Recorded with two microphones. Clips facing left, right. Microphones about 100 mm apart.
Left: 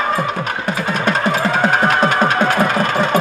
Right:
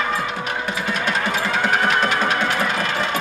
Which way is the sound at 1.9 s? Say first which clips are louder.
Left 5 dB; 40° left (ahead or behind).